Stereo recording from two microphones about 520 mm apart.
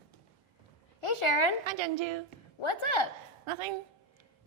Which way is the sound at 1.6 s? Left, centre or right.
Right.